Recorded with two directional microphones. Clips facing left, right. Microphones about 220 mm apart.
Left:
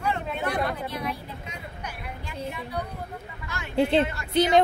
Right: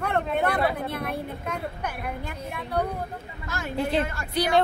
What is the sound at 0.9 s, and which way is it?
A woman's voice, 55° right (ahead or behind).